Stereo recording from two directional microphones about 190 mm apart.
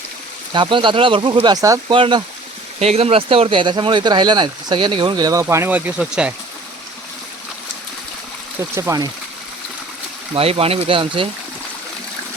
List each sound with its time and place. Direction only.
0.5 s speech: 25° right (ahead or behind); by 6.3 s 5° right (ahead or behind)
8.7 s speech: 15° right (ahead or behind)
10.3 s speech: 30° right (ahead or behind)